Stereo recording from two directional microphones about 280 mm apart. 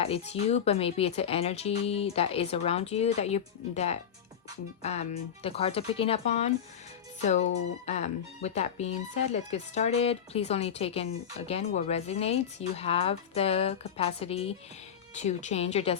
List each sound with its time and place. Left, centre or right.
0.0 s speech: left